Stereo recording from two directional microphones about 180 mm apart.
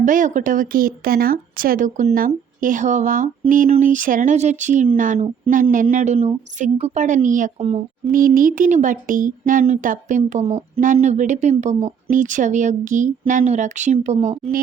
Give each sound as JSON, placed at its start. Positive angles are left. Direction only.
{"t": 0.0, "sound": "a woman's voice", "side_deg": -45}